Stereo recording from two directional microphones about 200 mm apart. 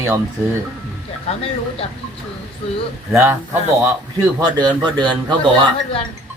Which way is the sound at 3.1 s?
10° right (ahead or behind).